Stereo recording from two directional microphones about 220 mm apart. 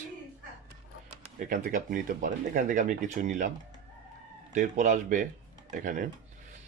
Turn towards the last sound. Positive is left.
turn(degrees=-40)  # may be behind; listen again after turning